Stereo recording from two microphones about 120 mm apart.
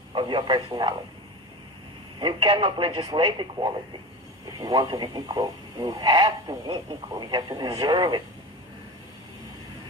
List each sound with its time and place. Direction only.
0.1 s speech: 40° right (ahead or behind)
2.1 s speech: 40° right (ahead or behind)